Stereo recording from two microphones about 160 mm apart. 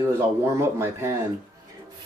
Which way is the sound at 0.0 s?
15° right (ahead or behind).